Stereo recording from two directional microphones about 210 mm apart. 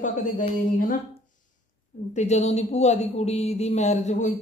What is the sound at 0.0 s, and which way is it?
Speech, 40° left (ahead or behind).